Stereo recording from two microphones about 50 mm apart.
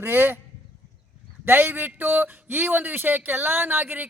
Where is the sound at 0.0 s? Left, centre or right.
Right.